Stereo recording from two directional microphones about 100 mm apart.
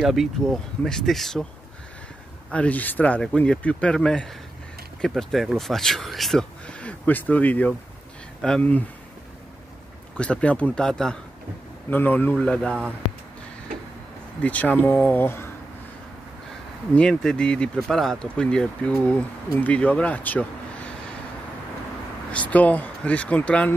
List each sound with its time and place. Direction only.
0.0 s speech: centre (ahead or behind)
2.5 s speech: 15° left (ahead or behind)
10.1 s speech: 10° left (ahead or behind)
11.9 s speech: 20° left (ahead or behind)
12.4 s speech: 10° left (ahead or behind)
14.4 s speech: 15° left (ahead or behind)
16.9 s speech: 10° left (ahead or behind)
22.3 s speech: 15° left (ahead or behind)